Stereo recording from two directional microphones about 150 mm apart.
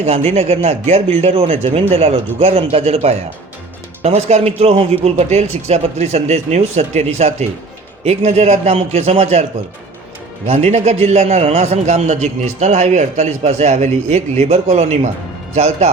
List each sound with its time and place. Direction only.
0.0 s a man's voice: 45° right (ahead or behind)